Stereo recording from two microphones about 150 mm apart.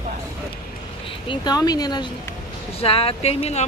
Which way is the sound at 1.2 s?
30° left (ahead or behind).